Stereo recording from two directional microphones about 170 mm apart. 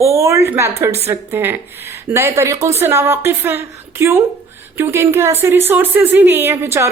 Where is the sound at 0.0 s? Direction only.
15° right (ahead or behind).